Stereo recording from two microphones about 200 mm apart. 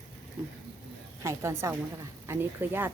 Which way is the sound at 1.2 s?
15° right (ahead or behind).